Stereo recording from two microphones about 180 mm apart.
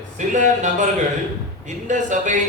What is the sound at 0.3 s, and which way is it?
Speech, 45° right (ahead or behind).